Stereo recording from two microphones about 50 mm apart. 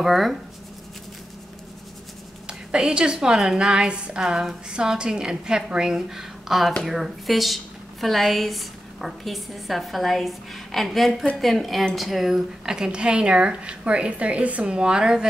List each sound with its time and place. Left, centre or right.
0.0 s speech: centre
2.4 s a sound: centre
3.2 s a woman's voice: centre